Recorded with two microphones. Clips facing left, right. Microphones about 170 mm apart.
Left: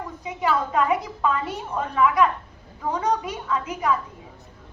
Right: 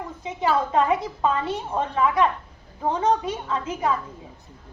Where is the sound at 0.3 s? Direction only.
30° right (ahead or behind).